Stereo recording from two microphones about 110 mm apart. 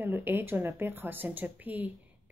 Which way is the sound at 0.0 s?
20° right (ahead or behind).